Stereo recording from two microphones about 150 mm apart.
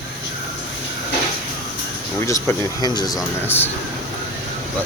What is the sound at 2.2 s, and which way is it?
Speech, 20° left (ahead or behind).